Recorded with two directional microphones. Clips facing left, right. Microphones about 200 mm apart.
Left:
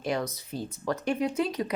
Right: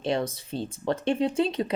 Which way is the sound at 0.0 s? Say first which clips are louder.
Right 3 dB; 30° right (ahead or behind).